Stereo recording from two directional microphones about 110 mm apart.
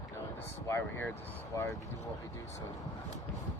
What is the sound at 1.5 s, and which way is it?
Speech, 30° left (ahead or behind).